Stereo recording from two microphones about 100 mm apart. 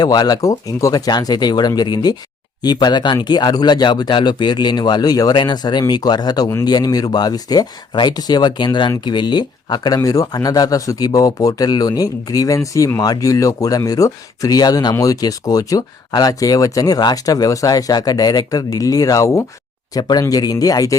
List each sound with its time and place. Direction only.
0.0 s speech: 40° left (ahead or behind)
19.9 s speech: 40° left (ahead or behind)